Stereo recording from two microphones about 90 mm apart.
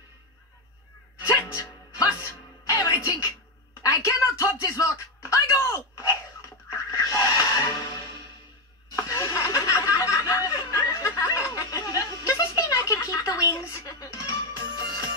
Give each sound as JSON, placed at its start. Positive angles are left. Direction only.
{"t": 1.2, "sound": "music", "side_deg": 35}
{"t": 2.6, "sound": "music", "side_deg": 40}
{"t": 3.8, "sound": "a sound", "side_deg": 35}
{"t": 8.9, "sound": "snicker", "side_deg": 40}